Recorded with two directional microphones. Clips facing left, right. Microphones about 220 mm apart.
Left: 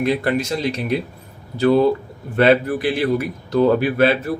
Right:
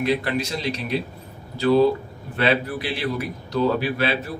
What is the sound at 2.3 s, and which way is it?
Speech, 50° left (ahead or behind).